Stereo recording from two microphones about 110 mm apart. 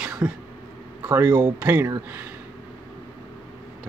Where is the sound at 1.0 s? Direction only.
20° right (ahead or behind).